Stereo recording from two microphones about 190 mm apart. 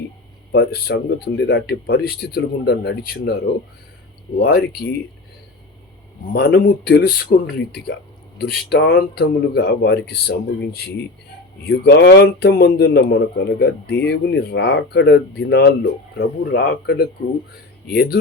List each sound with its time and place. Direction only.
0.5 s a man's voice: 55° left (ahead or behind)
4.4 s a man's voice: 55° left (ahead or behind)
6.3 s a man's voice: 55° left (ahead or behind)